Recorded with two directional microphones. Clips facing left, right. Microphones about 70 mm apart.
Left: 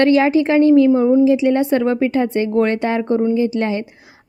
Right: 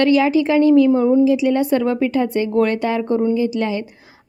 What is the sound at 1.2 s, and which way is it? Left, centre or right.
A woman's voice, left.